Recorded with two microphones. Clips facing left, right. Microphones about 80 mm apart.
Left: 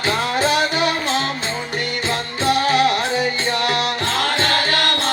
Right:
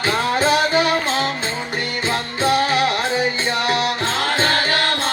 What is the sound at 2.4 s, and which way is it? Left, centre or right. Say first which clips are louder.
Music: left 1 dB; right.